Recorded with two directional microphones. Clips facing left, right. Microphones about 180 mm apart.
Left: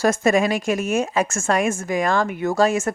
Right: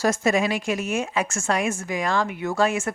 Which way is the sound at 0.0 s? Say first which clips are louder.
Left 3 dB; 50° left (ahead or behind).